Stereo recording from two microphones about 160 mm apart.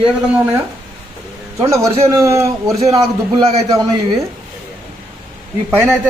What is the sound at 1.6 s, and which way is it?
A man's voice, 20° right (ahead or behind).